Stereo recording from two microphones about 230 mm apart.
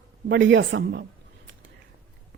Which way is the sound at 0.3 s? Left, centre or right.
Right.